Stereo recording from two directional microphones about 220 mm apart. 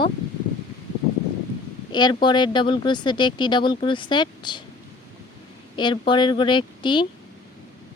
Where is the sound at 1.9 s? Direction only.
20° left (ahead or behind).